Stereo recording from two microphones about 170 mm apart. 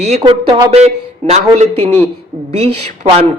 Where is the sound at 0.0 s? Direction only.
35° right (ahead or behind).